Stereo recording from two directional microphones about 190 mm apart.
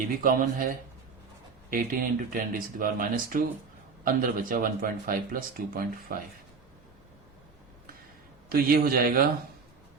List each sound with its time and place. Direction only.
0.2 s speech: 45° right (ahead or behind)
1.7 s speech: 50° right (ahead or behind)
8.4 s speech: 50° right (ahead or behind)